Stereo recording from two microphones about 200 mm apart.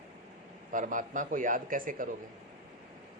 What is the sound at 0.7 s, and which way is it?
A man's voice, 40° right (ahead or behind).